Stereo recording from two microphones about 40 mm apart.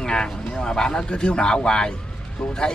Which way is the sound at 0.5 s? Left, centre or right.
Centre.